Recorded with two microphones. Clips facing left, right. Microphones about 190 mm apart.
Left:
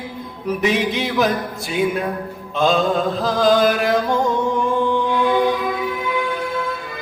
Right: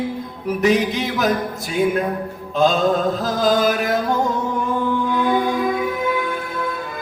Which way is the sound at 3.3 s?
Centre (ahead or behind).